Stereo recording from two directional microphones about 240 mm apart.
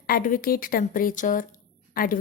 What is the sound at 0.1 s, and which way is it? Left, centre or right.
Speech, left.